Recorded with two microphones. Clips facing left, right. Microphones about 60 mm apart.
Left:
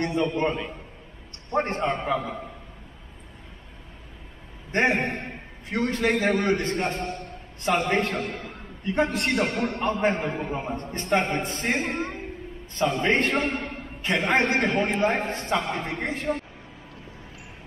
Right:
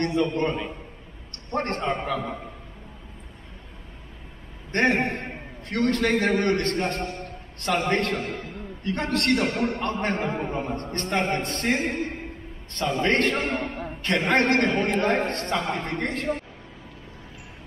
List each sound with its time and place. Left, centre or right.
0.0 s a man's voice: centre
4.7 s a man's voice: centre
13.0 s a man's voice: centre